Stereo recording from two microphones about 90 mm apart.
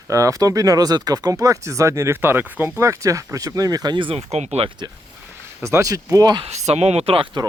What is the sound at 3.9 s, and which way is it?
Speech, 70° right (ahead or behind).